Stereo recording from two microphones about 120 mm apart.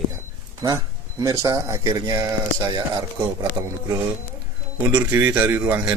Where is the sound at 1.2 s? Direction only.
25° right (ahead or behind).